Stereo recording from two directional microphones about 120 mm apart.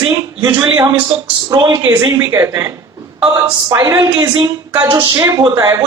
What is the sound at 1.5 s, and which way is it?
Speech, 40° right (ahead or behind).